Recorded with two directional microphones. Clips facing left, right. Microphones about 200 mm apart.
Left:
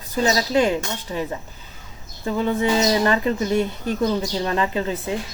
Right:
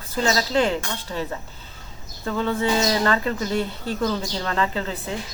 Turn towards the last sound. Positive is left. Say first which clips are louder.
# left 4 dB
turn(degrees=20)  # may be behind; listen again after turning